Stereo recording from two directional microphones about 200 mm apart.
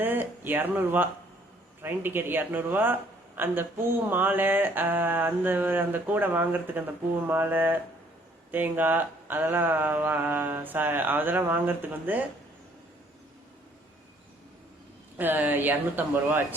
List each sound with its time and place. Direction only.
0.0 s speech: 10° right (ahead or behind)
15.2 s speech: 10° right (ahead or behind)